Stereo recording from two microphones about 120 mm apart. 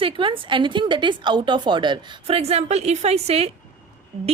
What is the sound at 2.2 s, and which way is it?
Speech, 60° right (ahead or behind).